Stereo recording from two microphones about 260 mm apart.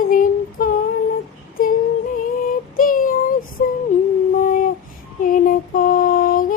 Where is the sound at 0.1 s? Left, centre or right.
Left.